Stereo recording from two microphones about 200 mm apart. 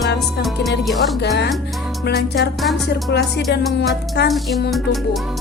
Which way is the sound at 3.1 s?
55° left (ahead or behind).